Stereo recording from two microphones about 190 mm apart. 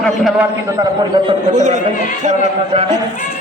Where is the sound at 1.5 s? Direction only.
40° right (ahead or behind).